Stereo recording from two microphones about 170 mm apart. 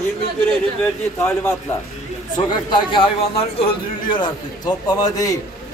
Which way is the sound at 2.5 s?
30° left (ahead or behind).